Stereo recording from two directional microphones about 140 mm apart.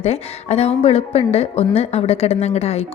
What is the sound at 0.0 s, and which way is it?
A woman's voice, 50° left (ahead or behind).